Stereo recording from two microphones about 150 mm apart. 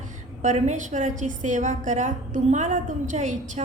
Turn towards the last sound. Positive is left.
turn(degrees=-55)  # may be behind; listen again after turning